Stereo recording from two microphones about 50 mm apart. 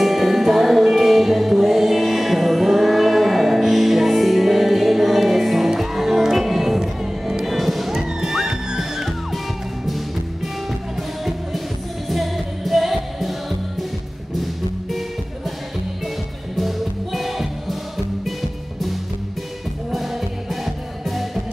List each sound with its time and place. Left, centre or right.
0.0 s music: centre
12.1 s music: centre
16.5 s music: centre
19.9 s music: centre